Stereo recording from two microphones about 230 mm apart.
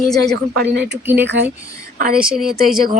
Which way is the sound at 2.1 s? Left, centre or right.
Centre.